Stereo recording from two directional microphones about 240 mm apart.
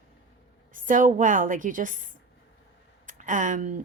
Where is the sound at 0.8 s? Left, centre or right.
Right.